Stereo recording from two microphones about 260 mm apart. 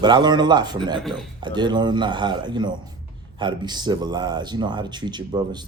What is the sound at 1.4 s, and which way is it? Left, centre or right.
Speech, centre.